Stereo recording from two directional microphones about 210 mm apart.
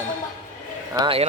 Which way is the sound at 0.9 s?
25° right (ahead or behind).